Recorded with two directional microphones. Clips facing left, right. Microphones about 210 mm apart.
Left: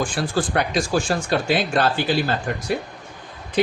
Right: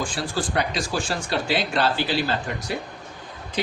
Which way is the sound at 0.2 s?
50° left (ahead or behind).